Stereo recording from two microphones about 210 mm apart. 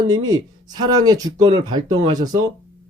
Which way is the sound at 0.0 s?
20° right (ahead or behind).